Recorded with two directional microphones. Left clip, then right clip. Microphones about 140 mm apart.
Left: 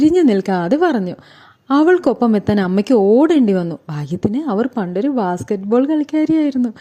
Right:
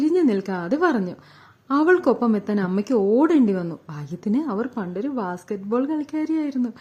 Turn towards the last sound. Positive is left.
turn(degrees=35)  # may be behind; listen again after turning